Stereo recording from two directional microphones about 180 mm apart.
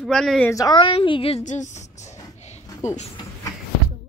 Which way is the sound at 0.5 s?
20° left (ahead or behind).